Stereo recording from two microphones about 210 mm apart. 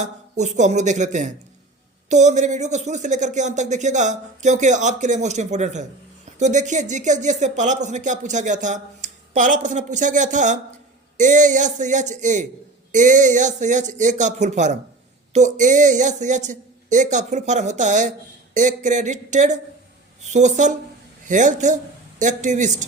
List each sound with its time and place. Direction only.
0.0 s speech: 35° right (ahead or behind)